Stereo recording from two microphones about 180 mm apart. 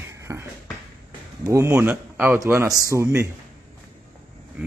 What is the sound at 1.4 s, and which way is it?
Speech, 15° right (ahead or behind).